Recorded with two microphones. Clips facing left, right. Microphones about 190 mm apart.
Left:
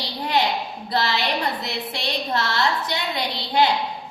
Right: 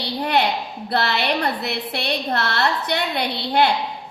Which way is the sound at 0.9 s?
60° right (ahead or behind).